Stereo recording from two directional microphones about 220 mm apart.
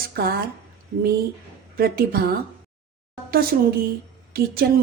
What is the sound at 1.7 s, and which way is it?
A woman's voice, 45° right (ahead or behind).